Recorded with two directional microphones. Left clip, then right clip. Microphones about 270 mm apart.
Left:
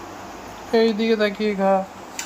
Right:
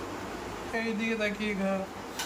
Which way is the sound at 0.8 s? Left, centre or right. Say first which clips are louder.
Left 13 dB; left.